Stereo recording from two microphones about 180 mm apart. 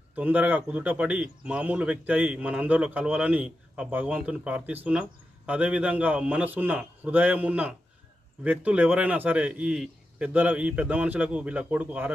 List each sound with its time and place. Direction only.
0.1 s a man's voice: 10° right (ahead or behind)